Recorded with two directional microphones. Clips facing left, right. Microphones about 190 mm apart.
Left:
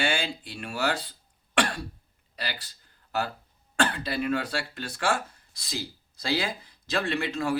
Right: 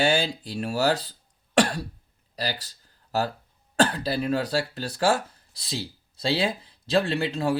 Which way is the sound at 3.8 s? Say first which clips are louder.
Right 4 dB; 35° right (ahead or behind).